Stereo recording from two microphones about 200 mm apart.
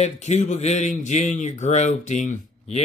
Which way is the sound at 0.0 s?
35° left (ahead or behind).